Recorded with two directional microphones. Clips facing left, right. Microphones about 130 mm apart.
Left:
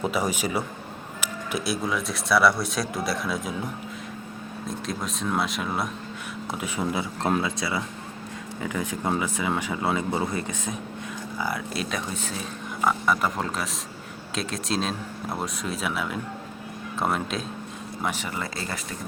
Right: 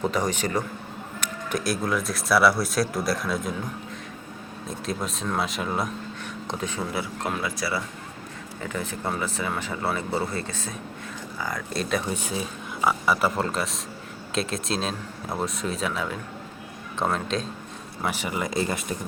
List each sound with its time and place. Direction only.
0.0 s speech: 10° left (ahead or behind)
4.9 s speech: centre (ahead or behind)
12.1 s speech: 10° right (ahead or behind); by 17.4 s 5° left (ahead or behind)
18.0 s speech: 10° right (ahead or behind)